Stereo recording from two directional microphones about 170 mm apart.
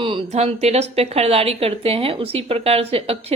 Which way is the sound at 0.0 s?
30° right (ahead or behind).